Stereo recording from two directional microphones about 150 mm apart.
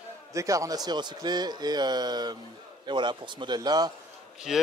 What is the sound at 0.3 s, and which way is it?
A man's voice, 20° right (ahead or behind).